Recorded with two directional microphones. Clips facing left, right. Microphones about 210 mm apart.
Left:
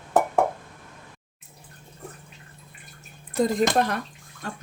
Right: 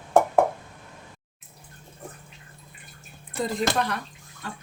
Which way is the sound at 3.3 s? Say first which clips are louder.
Left 5 dB; 45° left (ahead or behind).